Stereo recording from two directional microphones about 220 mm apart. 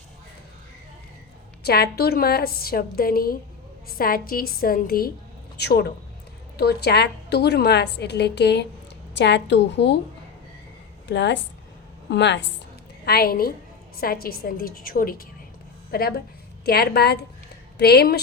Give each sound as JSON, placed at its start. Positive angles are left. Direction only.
{"t": 1.6, "sound": "a woman's voice", "side_deg": 45}
{"t": 11.1, "sound": "a woman's voice", "side_deg": 55}